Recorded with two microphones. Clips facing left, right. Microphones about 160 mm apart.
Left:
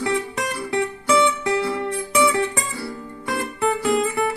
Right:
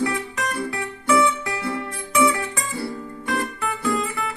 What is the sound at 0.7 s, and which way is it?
Music, 25° left (ahead or behind).